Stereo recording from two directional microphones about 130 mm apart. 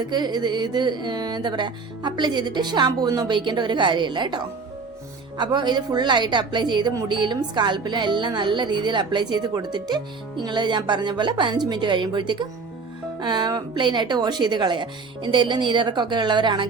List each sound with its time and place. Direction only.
0.0 s a woman's voice: 35° right (ahead or behind)
5.4 s a woman's voice: 35° right (ahead or behind)